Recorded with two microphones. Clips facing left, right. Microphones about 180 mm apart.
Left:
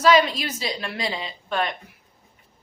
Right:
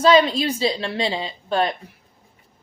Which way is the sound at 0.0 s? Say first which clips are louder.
Right 3 dB; 30° right (ahead or behind).